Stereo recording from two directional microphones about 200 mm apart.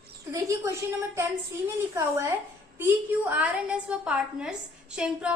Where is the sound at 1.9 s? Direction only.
15° right (ahead or behind).